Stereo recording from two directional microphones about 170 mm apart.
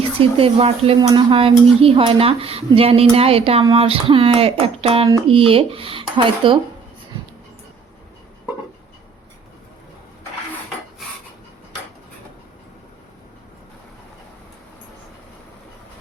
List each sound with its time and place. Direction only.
0.2 s speech: 35° right (ahead or behind)